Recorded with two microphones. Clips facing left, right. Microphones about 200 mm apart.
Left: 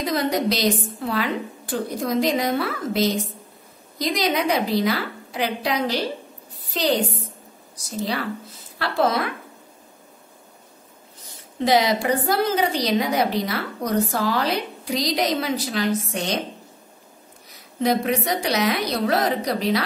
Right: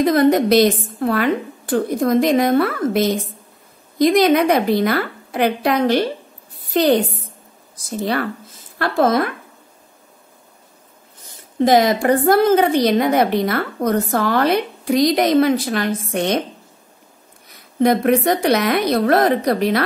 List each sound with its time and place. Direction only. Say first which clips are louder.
0.0 s a woman's voice: right 8 dB; 50° right (ahead or behind)
11.6 s a woman's voice: right 5 dB; 50° right (ahead or behind)
17.5 s a woman's voice: right 6 dB; 55° right (ahead or behind)